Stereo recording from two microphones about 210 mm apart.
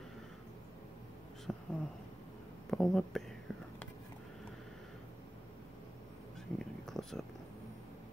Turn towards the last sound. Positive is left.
turn(degrees=0)  # may be behind; listen again after turning